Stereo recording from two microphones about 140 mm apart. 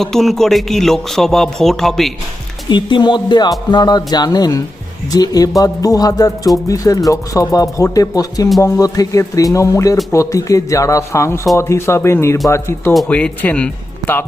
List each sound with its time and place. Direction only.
0.0 s a man's voice: centre (ahead or behind)
2.6 s speech: 35° left (ahead or behind)
12.9 s speech: 5° left (ahead or behind)